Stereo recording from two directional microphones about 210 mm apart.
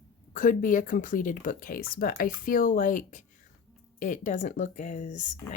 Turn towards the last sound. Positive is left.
turn(degrees=35)  # may be behind; listen again after turning